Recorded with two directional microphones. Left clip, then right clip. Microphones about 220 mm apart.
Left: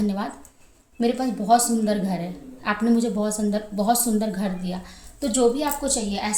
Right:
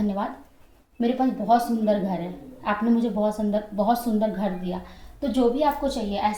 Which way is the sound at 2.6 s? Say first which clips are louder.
Left 1 dB; 50° left (ahead or behind).